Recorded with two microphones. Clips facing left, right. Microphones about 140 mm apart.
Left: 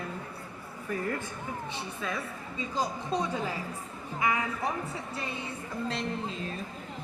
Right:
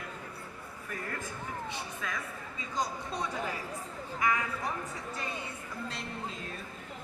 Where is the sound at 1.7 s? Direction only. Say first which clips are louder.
Left 3 dB; 30° left (ahead or behind).